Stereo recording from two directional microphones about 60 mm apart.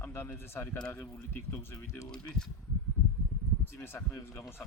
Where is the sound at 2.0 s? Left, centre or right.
Centre.